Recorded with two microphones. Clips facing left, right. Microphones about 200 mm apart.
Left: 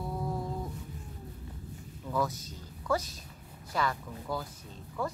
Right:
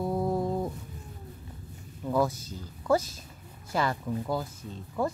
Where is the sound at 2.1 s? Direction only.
30° right (ahead or behind).